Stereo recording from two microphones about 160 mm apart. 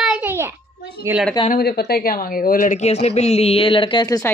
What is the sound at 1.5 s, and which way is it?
Speech, 85° left.